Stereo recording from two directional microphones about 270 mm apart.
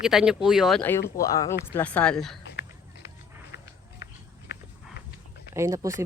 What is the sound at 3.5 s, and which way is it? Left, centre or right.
Run, left.